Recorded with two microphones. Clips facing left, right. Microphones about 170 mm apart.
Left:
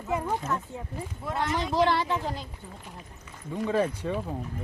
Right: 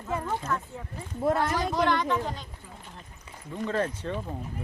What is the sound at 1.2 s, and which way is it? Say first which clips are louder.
Speech: right 6 dB; 50° right (ahead or behind).